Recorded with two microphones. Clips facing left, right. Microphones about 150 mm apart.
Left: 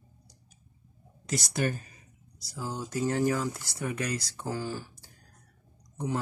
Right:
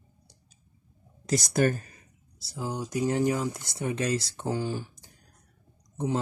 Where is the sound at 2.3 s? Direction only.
30° right (ahead or behind).